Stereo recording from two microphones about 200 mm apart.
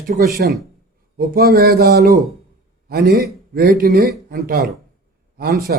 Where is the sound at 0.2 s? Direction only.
50° right (ahead or behind).